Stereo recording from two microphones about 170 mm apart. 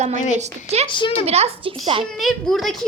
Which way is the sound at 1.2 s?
40° right (ahead or behind).